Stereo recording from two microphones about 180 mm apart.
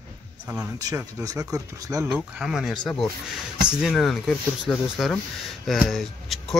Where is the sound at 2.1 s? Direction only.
5° right (ahead or behind).